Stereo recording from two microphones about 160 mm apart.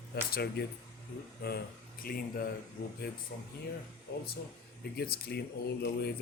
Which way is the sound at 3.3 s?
90° left.